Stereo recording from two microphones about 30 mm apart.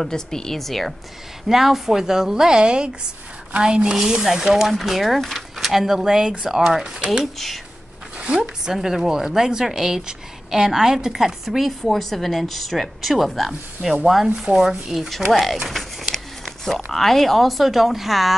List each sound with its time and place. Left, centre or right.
0.0 s speech: centre
1.5 s a woman's voice: centre
2.6 s a woman's voice: right
4.1 s speech: centre
4.7 s speech: centre
5.6 s speech: centre
6.0 s a woman's voice: right
7.3 s speech: centre
8.8 s a woman's voice: centre
11.9 s speech: centre
14.0 s a woman's voice: centre
15.0 s speech: centre
16.0 s a sound: centre
16.6 s speech: centre